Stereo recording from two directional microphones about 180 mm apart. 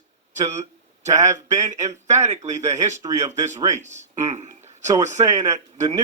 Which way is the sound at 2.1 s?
40° right (ahead or behind).